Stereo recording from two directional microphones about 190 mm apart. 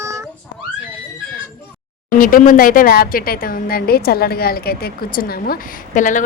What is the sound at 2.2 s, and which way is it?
A woman's voice, 45° left (ahead or behind).